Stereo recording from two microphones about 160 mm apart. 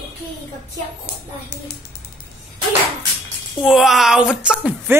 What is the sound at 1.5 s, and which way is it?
Speech, 90° left.